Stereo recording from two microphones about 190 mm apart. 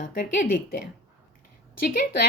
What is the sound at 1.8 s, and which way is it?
Speech, 50° left (ahead or behind).